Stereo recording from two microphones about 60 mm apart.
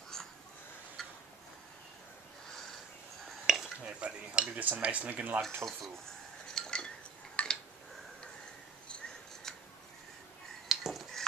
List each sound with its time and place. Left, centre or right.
1.0 s tick-tock: centre
3.3 s dishes: centre
3.8 s speech: centre
5.4 s speech: centre
6.5 s cutlery: centre
7.4 s a sound: left
10.7 s a sound: centre